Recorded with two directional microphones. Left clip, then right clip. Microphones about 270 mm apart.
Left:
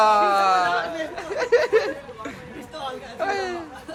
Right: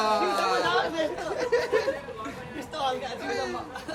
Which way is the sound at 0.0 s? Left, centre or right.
Centre.